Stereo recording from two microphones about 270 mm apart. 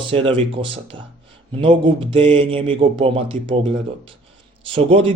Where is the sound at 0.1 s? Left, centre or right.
Centre.